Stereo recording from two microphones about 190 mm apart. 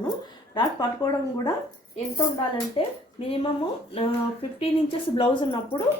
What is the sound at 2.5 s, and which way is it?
A woman's voice, 30° left (ahead or behind).